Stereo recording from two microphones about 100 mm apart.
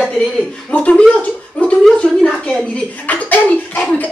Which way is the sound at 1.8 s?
5° left (ahead or behind).